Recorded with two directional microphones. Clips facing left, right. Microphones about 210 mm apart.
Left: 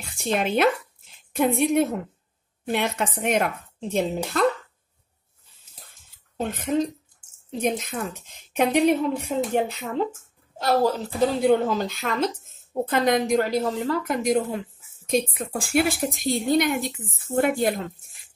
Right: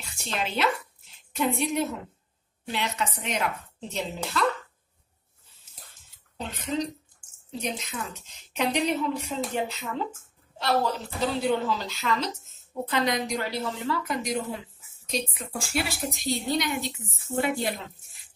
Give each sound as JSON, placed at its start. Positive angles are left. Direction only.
{"t": 0.0, "sound": "a woman's voice", "side_deg": 55}
{"t": 5.9, "sound": "a sound", "side_deg": 50}
{"t": 7.5, "sound": "a woman's voice", "side_deg": 50}
{"t": 11.1, "sound": "a woman's voice", "side_deg": 50}